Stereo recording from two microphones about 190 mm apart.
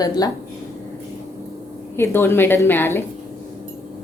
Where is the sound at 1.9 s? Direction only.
15° left (ahead or behind).